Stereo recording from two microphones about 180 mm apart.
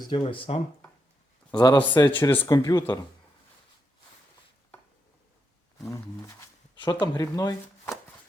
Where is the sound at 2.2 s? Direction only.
10° left (ahead or behind).